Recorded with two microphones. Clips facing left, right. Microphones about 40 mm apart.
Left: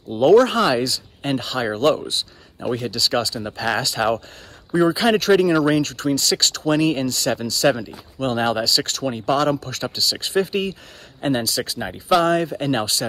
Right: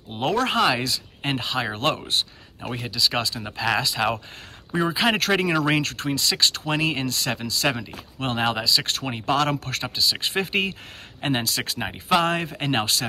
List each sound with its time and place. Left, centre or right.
0.1 s speech: right
1.8 s speech: right
2.7 s speech: centre
5.6 s speech: right
6.0 s speech: right
9.9 s speech: right
10.3 s speech: right
11.8 s speech: right